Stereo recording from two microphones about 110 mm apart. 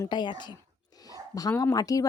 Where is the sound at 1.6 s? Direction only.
35° left (ahead or behind).